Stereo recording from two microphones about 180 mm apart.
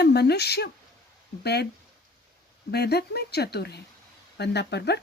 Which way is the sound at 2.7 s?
65° left (ahead or behind).